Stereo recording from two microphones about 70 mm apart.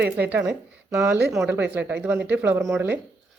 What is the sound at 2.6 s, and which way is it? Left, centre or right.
Speech, right.